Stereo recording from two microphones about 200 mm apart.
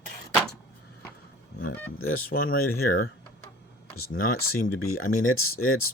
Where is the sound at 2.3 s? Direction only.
45° left (ahead or behind).